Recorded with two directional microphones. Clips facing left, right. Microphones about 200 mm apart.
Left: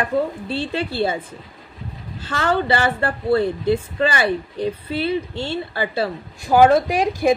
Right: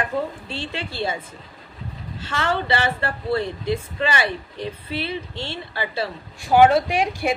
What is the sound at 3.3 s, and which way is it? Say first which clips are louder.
Speech: left 6 dB; 35° left (ahead or behind).